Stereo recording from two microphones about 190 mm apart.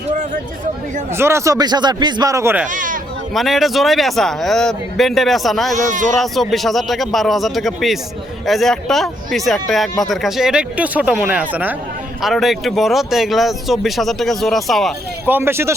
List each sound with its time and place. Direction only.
1.1 s speech: 15° right (ahead or behind)
2.6 s a sound: 45° right (ahead or behind)
3.3 s speech: centre (ahead or behind)
5.7 s speech: 40° right (ahead or behind)
6.1 s speech: centre (ahead or behind)
15.3 s speech: 10° right (ahead or behind)